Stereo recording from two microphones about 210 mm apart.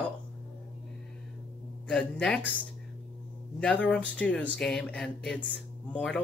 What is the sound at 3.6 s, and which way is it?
Speech, 5° left (ahead or behind).